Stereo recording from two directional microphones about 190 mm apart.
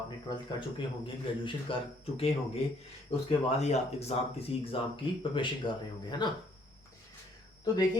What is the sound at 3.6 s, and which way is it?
Speech, 35° left (ahead or behind).